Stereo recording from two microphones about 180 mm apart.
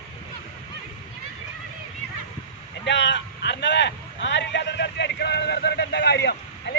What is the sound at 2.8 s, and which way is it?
Speech, 80° left.